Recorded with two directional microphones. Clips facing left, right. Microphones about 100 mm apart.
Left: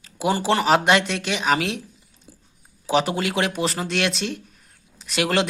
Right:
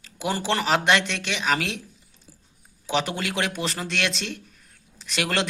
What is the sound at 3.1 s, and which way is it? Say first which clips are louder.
Speech: left 4 dB; 15° left (ahead or behind).